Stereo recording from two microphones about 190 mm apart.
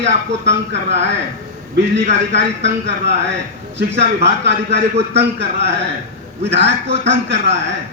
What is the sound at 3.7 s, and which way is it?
A man's voice, 65° right (ahead or behind).